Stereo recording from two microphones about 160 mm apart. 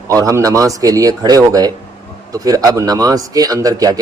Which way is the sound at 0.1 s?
20° right (ahead or behind).